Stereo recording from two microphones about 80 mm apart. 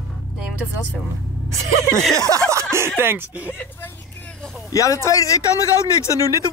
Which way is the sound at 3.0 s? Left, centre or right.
Right.